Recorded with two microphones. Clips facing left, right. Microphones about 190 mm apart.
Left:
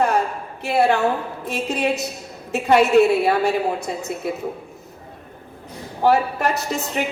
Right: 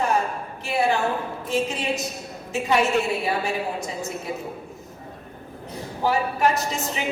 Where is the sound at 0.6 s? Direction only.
65° left (ahead or behind).